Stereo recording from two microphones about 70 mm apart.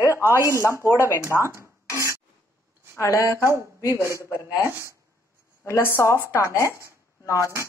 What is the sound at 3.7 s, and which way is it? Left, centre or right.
Speech, left.